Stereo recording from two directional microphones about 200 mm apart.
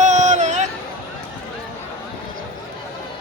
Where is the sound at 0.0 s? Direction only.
35° right (ahead or behind).